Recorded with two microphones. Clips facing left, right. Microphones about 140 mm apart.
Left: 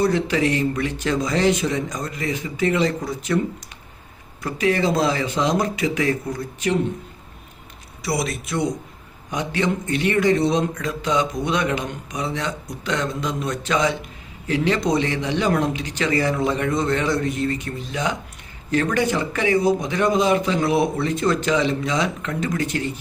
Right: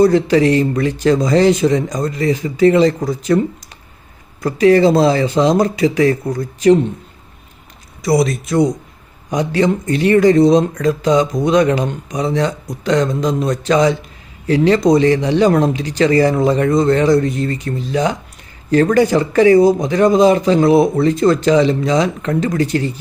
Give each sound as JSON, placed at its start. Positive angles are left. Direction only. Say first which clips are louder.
{"t": 0.0, "sound": "speech", "louder": "right 8 dB", "side_deg": -35}
{"t": 4.4, "sound": "speech", "louder": "right 10 dB", "side_deg": -35}
{"t": 8.0, "sound": "speech", "louder": "right 10 dB", "side_deg": -40}